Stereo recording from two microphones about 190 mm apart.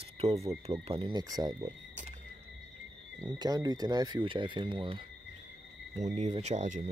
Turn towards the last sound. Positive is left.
turn(degrees=-40)  # may be behind; listen again after turning